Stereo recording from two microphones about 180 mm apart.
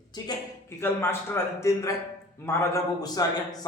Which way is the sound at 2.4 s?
15° left (ahead or behind).